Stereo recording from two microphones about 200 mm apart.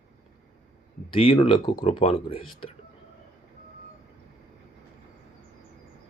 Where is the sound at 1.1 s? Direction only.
30° left (ahead or behind).